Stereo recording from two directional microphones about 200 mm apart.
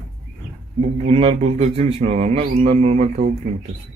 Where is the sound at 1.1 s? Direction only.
30° right (ahead or behind).